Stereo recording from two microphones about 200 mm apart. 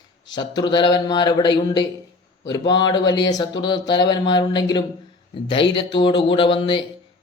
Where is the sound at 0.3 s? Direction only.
20° left (ahead or behind).